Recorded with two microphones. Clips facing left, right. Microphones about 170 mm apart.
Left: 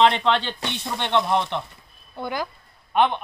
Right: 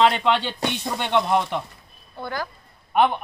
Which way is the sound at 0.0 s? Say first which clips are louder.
Even; 10° right (ahead or behind).